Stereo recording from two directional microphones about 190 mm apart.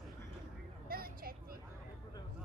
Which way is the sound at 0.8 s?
50° right (ahead or behind).